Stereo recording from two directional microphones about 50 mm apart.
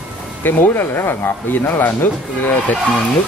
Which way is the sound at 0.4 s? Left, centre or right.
Left.